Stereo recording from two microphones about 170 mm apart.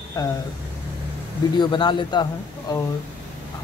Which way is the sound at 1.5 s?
30° left (ahead or behind).